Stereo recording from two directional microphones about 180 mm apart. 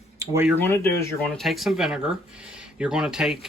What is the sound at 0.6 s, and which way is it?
Speech, 15° left (ahead or behind).